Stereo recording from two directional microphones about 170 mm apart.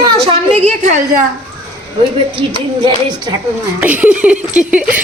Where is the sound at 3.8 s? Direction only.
10° right (ahead or behind).